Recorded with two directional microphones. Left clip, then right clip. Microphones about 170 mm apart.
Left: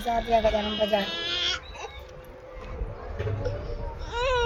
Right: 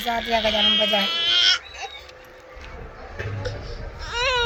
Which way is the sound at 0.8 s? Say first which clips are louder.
Right 5 dB; 35° left (ahead or behind).